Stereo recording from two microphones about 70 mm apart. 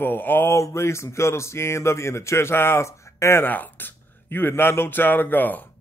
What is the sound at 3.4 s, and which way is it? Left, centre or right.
Speech, left.